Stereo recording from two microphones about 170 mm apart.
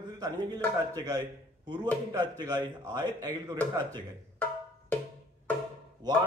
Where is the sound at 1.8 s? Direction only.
10° left (ahead or behind).